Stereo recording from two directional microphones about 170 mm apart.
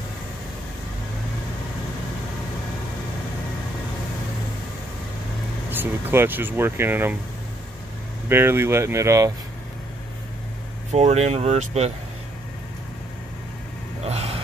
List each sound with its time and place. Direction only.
5.7 s speech: 10° right (ahead or behind)
8.3 s speech: 15° right (ahead or behind)
10.9 s speech: 40° right (ahead or behind)
14.0 s gasp: 40° right (ahead or behind)